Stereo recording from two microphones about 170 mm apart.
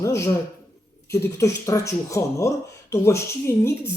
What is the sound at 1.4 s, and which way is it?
Speech, 20° left (ahead or behind).